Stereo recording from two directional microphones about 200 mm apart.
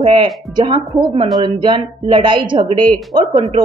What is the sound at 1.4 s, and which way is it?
A woman's voice, 25° right (ahead or behind).